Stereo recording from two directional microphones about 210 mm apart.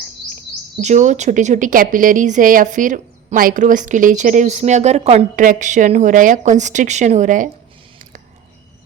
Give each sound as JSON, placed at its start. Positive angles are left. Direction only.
{"t": 0.8, "sound": "a woman's voice", "side_deg": -35}